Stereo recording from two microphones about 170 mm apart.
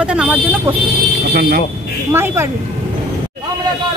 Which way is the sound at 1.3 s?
60° right (ahead or behind).